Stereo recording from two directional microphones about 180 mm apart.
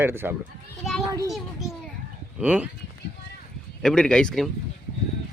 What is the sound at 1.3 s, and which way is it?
A child's voice, centre (ahead or behind).